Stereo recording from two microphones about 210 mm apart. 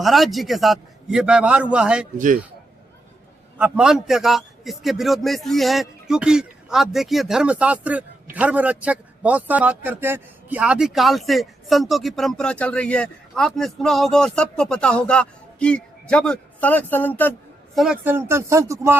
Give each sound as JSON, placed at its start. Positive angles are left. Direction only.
{"t": 0.0, "sound": "a man's voice", "side_deg": 0}
{"t": 2.1, "sound": "a man's voice", "side_deg": -40}
{"t": 3.6, "sound": "a man's voice", "side_deg": -5}
{"t": 17.7, "sound": "speech", "side_deg": -5}